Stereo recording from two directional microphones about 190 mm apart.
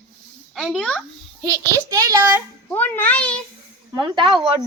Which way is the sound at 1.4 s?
15° right (ahead or behind).